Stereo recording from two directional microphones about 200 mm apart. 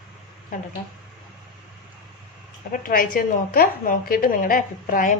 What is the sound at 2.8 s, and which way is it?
A woman's voice, 45° left (ahead or behind).